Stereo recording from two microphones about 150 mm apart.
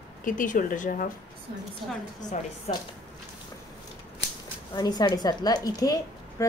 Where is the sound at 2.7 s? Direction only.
50° left (ahead or behind).